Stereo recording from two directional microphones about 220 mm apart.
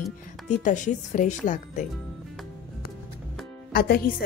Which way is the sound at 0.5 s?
35° left (ahead or behind).